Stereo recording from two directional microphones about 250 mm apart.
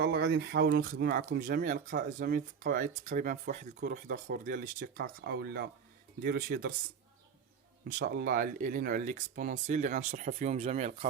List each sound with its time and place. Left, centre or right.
0.0 s speech: right
7.9 s speech: right